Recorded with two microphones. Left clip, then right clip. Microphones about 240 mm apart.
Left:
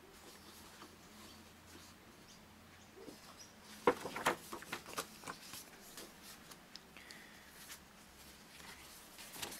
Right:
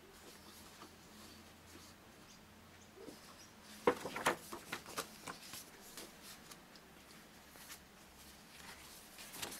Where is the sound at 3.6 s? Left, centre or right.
Centre.